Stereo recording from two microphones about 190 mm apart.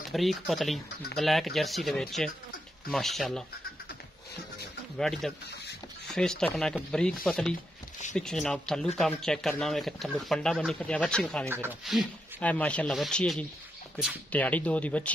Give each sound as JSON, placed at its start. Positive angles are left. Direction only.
{"t": 0.1, "sound": "speech", "side_deg": 0}
{"t": 4.9, "sound": "speech", "side_deg": 0}
{"t": 11.4, "sound": "speech", "side_deg": -10}
{"t": 11.8, "sound": "speech", "side_deg": 0}